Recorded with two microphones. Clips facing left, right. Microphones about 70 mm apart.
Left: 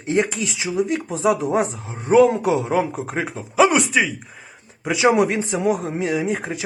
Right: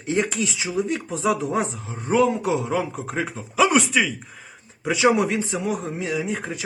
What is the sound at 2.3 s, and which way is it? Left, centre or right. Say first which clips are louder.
Speech: left 3 dB; left.